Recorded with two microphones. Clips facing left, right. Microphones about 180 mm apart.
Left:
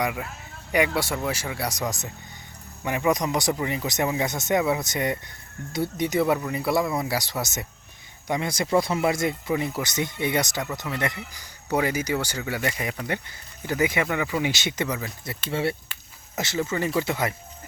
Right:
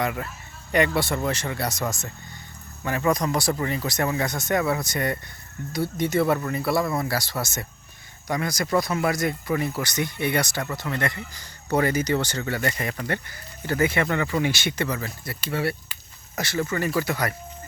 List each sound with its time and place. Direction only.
0.0 s speech: 10° left (ahead or behind)